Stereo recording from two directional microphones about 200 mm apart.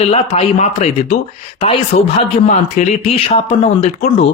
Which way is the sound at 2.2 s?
35° left (ahead or behind).